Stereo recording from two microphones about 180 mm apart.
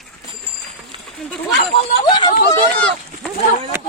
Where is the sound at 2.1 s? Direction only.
25° left (ahead or behind).